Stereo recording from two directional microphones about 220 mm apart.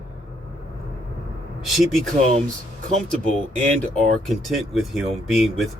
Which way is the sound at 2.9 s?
30° right (ahead or behind).